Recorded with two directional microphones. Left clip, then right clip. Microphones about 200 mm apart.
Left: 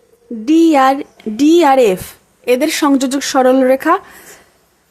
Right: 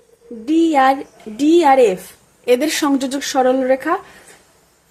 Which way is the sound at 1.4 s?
25° left (ahead or behind).